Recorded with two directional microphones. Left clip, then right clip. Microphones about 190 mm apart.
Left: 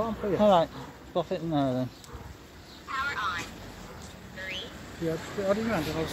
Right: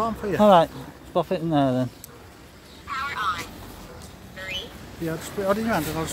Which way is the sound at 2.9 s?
50° right (ahead or behind).